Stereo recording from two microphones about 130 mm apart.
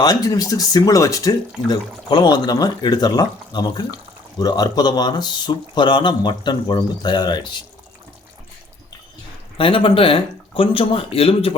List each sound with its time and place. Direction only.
0.0 s speech: 30° left (ahead or behind)
9.6 s speech: 45° left (ahead or behind)